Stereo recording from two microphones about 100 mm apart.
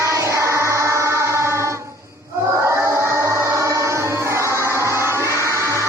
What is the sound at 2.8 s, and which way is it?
Music, 25° right (ahead or behind).